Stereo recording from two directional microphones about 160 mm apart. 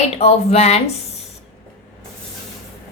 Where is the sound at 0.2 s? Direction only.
40° left (ahead or behind).